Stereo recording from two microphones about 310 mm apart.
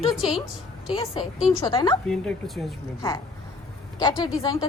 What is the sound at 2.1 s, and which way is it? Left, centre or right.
Speech, centre.